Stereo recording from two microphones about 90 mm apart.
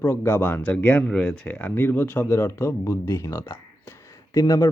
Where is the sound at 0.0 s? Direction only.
30° left (ahead or behind).